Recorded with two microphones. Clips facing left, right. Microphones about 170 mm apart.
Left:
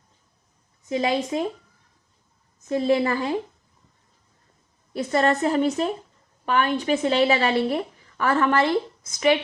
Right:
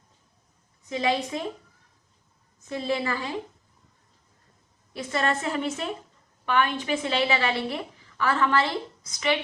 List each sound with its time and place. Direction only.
0.9 s a woman's voice: 40° left (ahead or behind)
2.6 s a woman's voice: 40° left (ahead or behind)
4.9 s a woman's voice: 45° left (ahead or behind)